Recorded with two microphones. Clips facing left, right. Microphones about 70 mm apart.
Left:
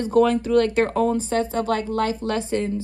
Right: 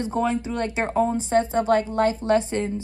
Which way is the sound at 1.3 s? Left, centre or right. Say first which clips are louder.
Right 3 dB; right.